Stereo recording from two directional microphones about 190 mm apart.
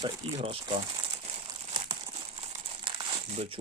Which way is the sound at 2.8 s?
30° right (ahead or behind).